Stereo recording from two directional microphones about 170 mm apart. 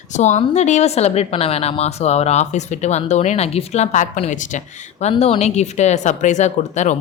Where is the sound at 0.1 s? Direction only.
45° left (ahead or behind).